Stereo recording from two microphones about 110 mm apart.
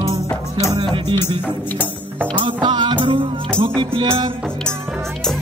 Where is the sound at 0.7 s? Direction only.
45° right (ahead or behind).